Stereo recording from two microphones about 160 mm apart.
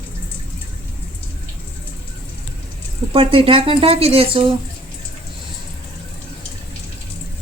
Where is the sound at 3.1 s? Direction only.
35° right (ahead or behind).